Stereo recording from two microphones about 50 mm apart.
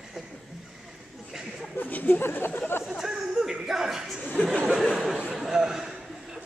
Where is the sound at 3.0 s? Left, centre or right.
Centre.